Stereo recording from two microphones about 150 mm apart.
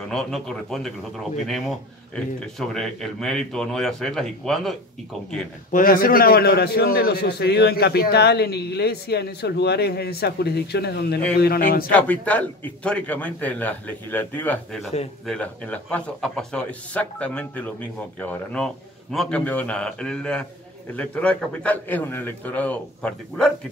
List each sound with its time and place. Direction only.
0.1 s speech: 5° left (ahead or behind)
5.7 s a man's voice: 70° left (ahead or behind)
11.9 s speech: 10° left (ahead or behind)